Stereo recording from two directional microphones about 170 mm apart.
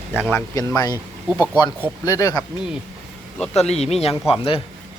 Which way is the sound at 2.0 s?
20° left (ahead or behind).